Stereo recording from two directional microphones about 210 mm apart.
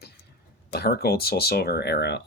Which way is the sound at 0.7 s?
50° left (ahead or behind).